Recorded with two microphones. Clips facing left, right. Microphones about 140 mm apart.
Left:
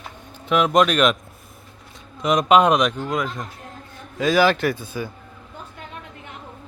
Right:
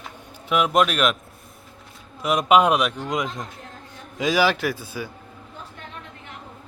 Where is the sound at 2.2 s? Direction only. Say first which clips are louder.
Left 2 dB; 5° right (ahead or behind).